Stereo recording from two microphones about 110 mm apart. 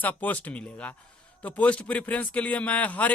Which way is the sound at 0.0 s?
15° left (ahead or behind).